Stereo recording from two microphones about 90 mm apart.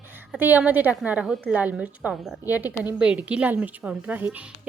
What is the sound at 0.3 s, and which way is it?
Speech, 20° right (ahead or behind).